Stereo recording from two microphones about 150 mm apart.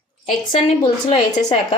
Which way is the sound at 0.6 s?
35° left (ahead or behind).